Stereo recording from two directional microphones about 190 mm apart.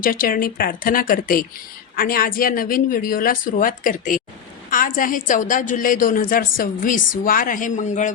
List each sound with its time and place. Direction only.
0.0 s a woman's voice: 50° left (ahead or behind)